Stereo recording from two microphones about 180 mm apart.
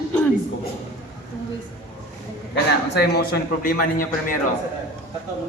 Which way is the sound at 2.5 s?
65° left (ahead or behind).